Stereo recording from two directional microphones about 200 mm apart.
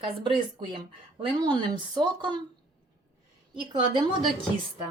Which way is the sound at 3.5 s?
25° right (ahead or behind).